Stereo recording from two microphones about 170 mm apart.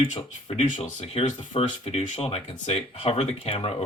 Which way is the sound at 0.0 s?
35° left (ahead or behind).